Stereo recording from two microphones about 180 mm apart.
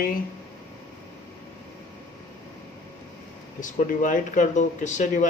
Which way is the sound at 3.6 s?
45° left (ahead or behind).